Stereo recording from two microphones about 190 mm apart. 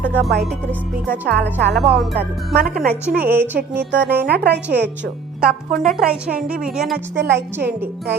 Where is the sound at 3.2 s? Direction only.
10° right (ahead or behind).